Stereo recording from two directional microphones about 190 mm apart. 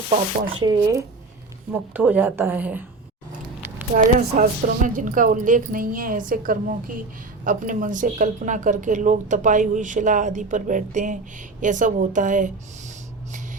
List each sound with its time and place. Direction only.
0.1 s a woman's voice: 50° right (ahead or behind)
0.6 s a woman's voice: 20° right (ahead or behind)
3.9 s a woman's voice: 45° right (ahead or behind)